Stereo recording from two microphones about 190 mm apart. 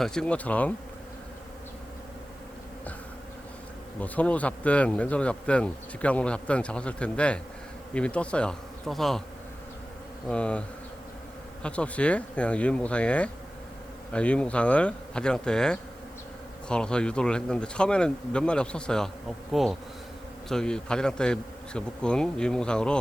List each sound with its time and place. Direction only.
0.0 s speech: 5° left (ahead or behind)
4.0 s speech: 10° left (ahead or behind)
10.2 s speech: 5° left (ahead or behind)